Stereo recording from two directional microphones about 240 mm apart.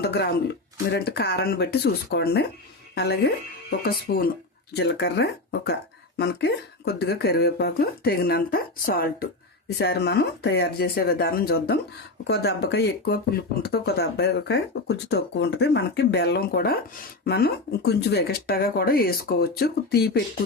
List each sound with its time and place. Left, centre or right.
0.0 s a woman's voice: left